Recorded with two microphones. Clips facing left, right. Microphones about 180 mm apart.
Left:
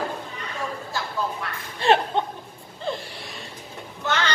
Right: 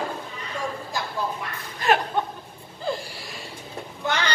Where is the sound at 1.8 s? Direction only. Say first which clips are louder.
Left 2 dB; 30° left (ahead or behind).